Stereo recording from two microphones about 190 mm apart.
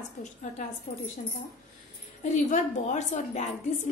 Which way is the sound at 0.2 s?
40° left (ahead or behind).